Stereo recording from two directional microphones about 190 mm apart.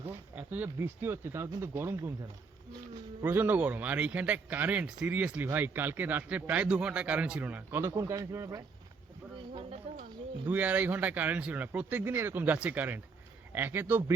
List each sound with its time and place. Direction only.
0.1 s speech: 10° right (ahead or behind)
3.2 s speech: 10° right (ahead or behind)
9.5 s a sound: 30° right (ahead or behind)
10.4 s speech: 10° right (ahead or behind)